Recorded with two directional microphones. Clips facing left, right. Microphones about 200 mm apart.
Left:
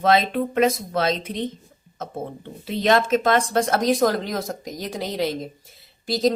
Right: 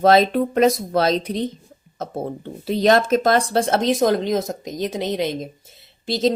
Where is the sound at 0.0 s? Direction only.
40° right (ahead or behind).